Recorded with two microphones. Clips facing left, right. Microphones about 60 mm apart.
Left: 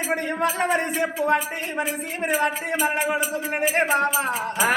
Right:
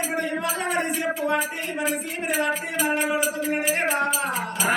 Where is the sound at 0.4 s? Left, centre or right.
Left.